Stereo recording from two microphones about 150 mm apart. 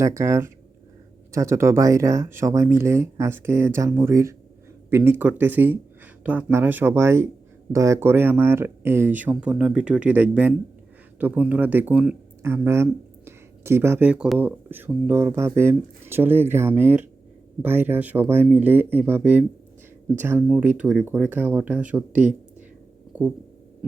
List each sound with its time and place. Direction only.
0.0 s speech: 20° right (ahead or behind)